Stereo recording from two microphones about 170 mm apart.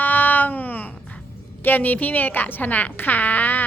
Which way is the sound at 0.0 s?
10° left (ahead or behind).